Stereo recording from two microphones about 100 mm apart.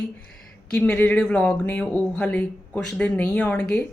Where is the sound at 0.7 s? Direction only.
15° left (ahead or behind).